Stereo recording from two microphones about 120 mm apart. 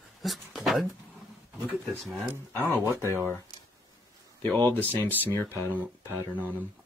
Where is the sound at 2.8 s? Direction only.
20° right (ahead or behind).